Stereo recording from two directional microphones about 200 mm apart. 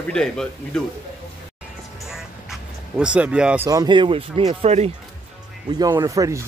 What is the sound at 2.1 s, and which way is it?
Speech, 5° right (ahead or behind).